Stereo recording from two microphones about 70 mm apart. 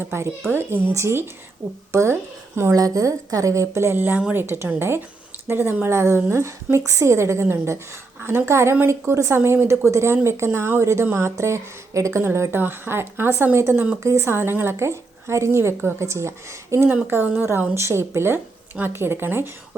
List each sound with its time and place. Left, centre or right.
0.0 s speech: right
2.7 s a woman's voice: right
17.1 s speech: right